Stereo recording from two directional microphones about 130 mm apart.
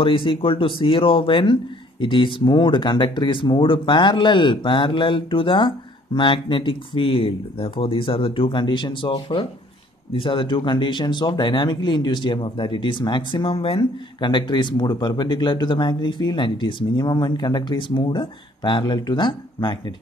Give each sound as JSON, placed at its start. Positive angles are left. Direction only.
{"t": 0.0, "sound": "speech", "side_deg": 40}